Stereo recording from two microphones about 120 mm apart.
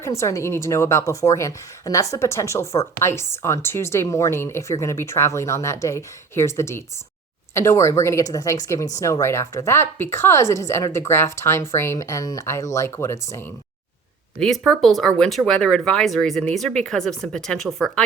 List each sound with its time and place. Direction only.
0.0 s a woman's voice: 25° left (ahead or behind)
14.3 s speech: 5° left (ahead or behind)